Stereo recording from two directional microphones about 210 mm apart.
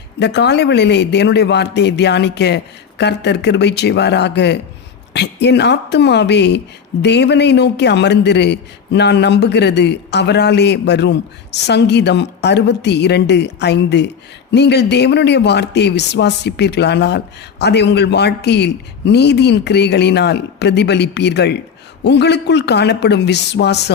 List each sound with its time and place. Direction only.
0.2 s a man's voice: 55° left (ahead or behind)